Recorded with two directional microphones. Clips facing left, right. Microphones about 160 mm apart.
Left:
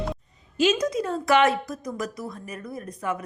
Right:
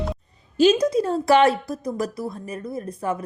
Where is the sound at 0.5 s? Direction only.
35° right (ahead or behind).